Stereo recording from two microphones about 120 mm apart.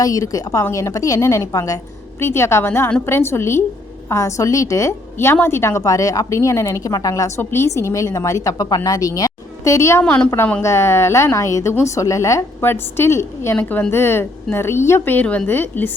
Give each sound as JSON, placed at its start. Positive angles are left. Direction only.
{"t": 0.0, "sound": "a woman's voice", "side_deg": 30}
{"t": 10.0, "sound": "a woman's voice", "side_deg": 10}